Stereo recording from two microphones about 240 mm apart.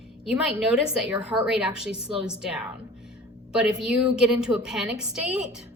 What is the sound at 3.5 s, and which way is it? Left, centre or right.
A woman's voice, centre.